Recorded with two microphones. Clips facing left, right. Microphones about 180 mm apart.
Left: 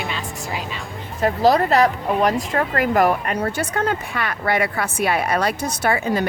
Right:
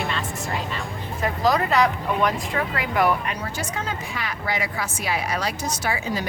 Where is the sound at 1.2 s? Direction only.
35° left (ahead or behind).